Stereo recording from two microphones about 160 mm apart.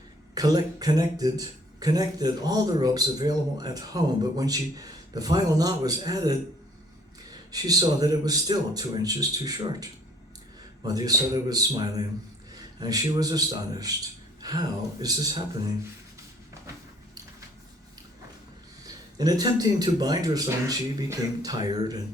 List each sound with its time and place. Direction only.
0.3 s speech: 25° right (ahead or behind)
7.5 s speech: 25° right (ahead or behind)
19.1 s speech: 25° right (ahead or behind)